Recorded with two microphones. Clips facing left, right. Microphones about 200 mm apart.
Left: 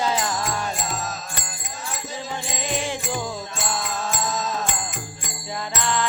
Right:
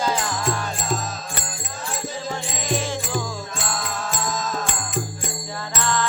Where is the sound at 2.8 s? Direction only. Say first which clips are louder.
Right 1 dB; 15° left (ahead or behind).